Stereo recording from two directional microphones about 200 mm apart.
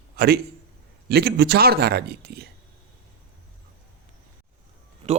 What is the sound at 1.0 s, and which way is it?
A man's voice, 50° right (ahead or behind).